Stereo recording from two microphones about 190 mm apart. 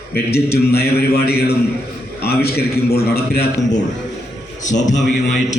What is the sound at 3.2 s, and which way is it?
Speech, 55° left (ahead or behind).